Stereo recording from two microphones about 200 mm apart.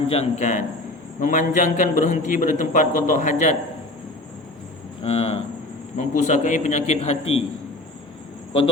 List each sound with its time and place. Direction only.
0.1 s a man's voice: 35° left (ahead or behind)
5.0 s a man's voice: 30° left (ahead or behind)